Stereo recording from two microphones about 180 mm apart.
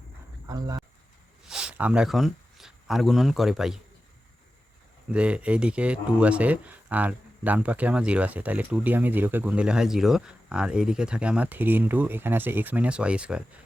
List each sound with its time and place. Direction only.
0.4 s speech: 20° right (ahead or behind)
1.5 s speech: 5° right (ahead or behind)
5.1 s speech: 5° right (ahead or behind)